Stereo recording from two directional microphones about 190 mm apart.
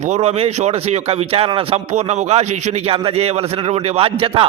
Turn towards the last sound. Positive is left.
turn(degrees=-30)  # may be behind; listen again after turning